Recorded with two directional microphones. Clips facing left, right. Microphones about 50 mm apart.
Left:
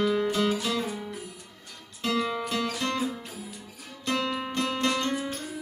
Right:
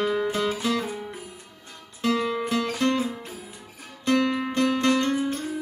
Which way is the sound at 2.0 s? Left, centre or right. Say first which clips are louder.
Right 3 dB; right.